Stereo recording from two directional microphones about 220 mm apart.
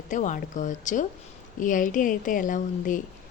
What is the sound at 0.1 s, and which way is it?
A woman's voice, 35° left (ahead or behind).